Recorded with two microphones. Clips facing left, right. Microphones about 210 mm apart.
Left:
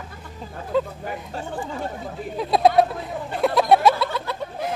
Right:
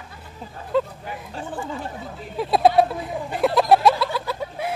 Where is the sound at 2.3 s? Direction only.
Centre (ahead or behind).